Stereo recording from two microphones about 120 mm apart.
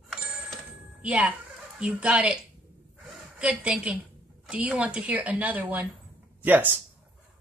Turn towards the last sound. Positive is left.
turn(degrees=-15)  # may be behind; listen again after turning